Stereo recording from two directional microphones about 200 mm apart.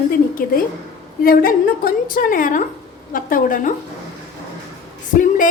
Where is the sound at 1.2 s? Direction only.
45° left (ahead or behind).